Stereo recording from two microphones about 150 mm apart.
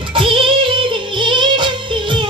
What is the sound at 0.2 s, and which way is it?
Music, 35° right (ahead or behind).